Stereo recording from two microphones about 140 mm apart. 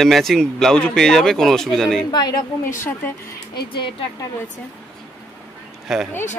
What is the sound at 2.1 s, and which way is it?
Speech, 30° left (ahead or behind).